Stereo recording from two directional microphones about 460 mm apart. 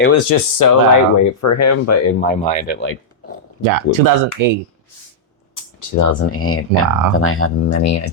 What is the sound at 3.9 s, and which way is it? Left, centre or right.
Speech, left.